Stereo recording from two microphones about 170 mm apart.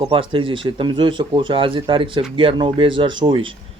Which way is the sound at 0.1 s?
30° right (ahead or behind).